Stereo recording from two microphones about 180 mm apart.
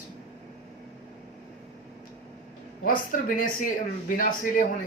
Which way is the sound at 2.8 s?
50° left (ahead or behind).